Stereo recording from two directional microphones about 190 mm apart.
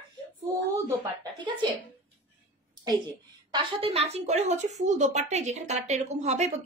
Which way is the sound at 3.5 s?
30° right (ahead or behind).